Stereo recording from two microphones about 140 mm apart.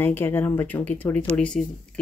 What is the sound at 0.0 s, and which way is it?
Speech, 15° left (ahead or behind).